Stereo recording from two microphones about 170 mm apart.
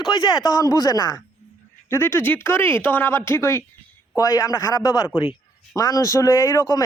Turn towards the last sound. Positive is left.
turn(degrees=20)  # may be behind; listen again after turning